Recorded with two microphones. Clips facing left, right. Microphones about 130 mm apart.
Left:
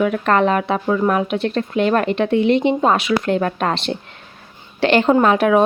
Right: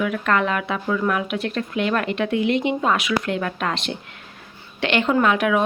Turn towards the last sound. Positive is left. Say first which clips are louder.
# left 5 dB
turn(degrees=35)  # may be behind; listen again after turning